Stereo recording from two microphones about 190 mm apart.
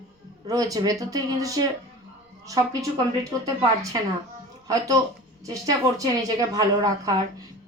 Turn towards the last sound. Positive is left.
turn(degrees=-20)  # may be behind; listen again after turning